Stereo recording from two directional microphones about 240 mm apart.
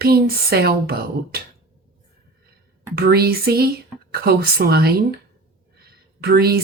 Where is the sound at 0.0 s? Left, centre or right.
Right.